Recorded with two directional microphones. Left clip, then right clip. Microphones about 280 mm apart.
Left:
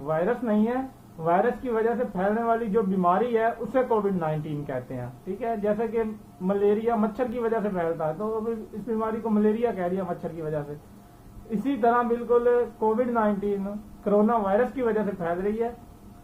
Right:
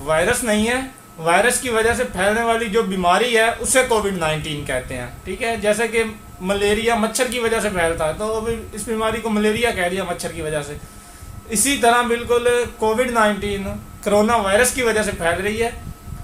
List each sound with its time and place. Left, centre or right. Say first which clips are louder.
0.0 s a man's voice: right 8 dB; right
11.6 s a man's voice: right 7 dB; right